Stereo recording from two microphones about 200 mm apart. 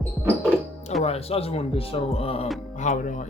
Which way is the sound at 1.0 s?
30° left (ahead or behind).